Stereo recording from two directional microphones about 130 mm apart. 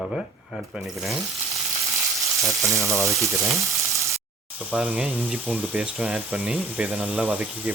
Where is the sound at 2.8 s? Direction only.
20° right (ahead or behind).